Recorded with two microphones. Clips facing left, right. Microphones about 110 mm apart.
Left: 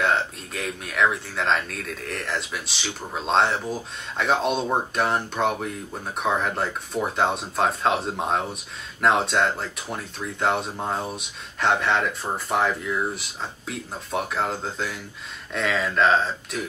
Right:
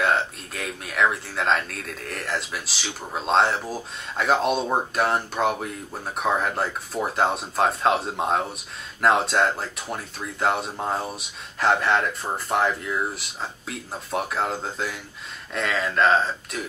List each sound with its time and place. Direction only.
0.0 s speech: centre (ahead or behind)